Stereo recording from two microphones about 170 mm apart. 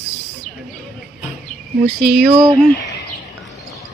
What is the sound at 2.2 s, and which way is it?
Speech, 30° right (ahead or behind).